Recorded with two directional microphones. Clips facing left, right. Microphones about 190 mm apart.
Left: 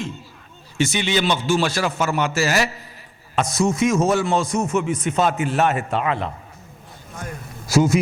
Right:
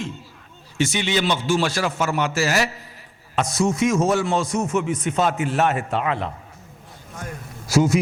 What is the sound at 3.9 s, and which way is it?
A man's voice, 25° left (ahead or behind).